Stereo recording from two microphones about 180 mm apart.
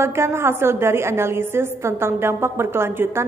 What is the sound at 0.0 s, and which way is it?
A woman's voice, 15° right (ahead or behind).